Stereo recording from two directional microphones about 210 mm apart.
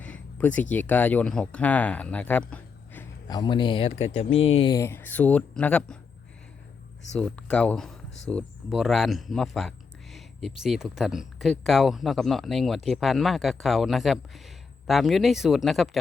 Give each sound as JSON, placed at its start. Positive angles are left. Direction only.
{"t": 0.0, "sound": "a sound", "side_deg": 5}
{"t": 0.7, "sound": "speech", "side_deg": 10}
{"t": 4.7, "sound": "speech", "side_deg": 10}
{"t": 7.1, "sound": "speech", "side_deg": 5}